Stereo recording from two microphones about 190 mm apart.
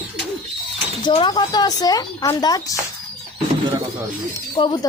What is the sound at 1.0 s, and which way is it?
Speech, 25° left (ahead or behind).